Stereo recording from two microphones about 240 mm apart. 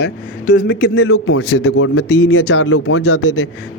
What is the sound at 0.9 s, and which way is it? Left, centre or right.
A man's voice, left.